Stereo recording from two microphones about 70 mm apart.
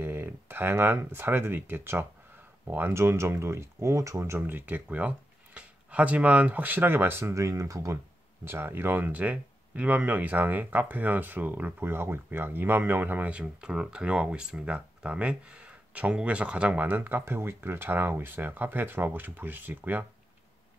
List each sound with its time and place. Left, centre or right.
0.0 s a sound: right
1.1 s speech: right
8.5 s speech: right